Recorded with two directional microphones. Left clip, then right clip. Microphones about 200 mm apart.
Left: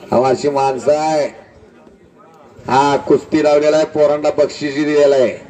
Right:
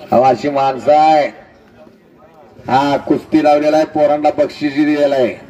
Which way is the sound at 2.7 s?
50° left (ahead or behind).